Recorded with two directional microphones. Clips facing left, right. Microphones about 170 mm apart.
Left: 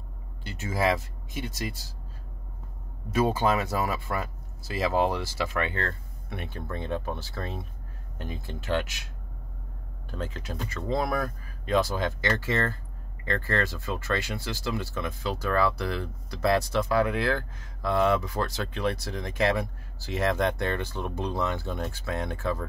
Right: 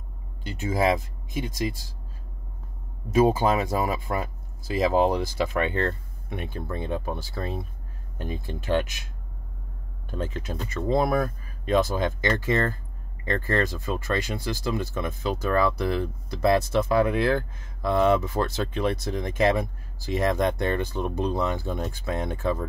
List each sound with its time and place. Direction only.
0.5 s speech: 15° right (ahead or behind)
3.1 s speech: 15° right (ahead or behind)
10.1 s speech: 20° right (ahead or behind)